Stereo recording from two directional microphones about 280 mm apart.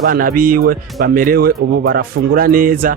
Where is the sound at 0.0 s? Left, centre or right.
Right.